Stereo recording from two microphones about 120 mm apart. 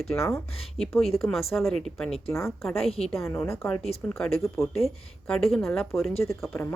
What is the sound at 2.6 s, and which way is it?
Speech, 5° left (ahead or behind).